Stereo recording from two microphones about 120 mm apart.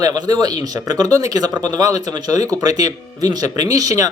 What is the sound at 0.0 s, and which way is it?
Speech, 30° right (ahead or behind).